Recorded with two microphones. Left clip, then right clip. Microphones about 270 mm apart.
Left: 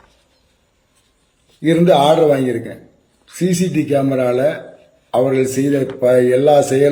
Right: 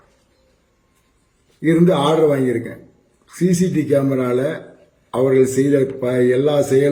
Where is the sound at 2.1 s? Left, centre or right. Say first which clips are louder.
Left 3 dB; centre.